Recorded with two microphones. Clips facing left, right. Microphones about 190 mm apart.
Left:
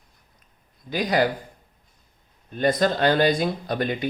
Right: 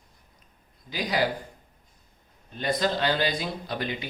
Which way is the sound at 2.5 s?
50° left (ahead or behind).